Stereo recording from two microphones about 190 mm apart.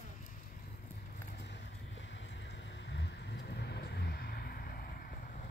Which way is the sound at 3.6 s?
60° left (ahead or behind).